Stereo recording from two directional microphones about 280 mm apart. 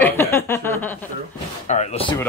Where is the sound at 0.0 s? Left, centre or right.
Centre.